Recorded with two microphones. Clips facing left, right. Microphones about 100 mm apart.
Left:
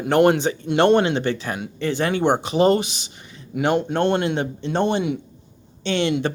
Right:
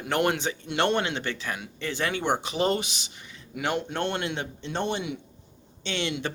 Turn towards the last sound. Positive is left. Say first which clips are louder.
# left 9 dB
turn(degrees=40)  # may be behind; listen again after turning